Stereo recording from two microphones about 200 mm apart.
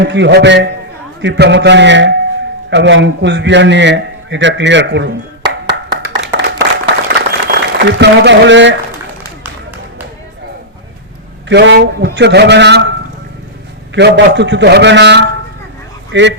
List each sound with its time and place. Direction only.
0.0 s a man's voice: 60° right (ahead or behind)
6.3 s a sound: 60° right (ahead or behind)
11.4 s a man's voice: 60° right (ahead or behind)
13.9 s a man's voice: 60° right (ahead or behind)